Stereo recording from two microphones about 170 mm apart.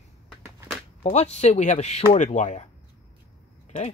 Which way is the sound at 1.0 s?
40° left (ahead or behind).